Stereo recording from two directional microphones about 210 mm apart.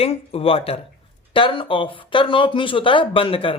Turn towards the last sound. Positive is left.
turn(degrees=25)  # may be behind; listen again after turning